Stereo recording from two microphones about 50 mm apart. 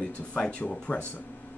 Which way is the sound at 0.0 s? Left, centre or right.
Left.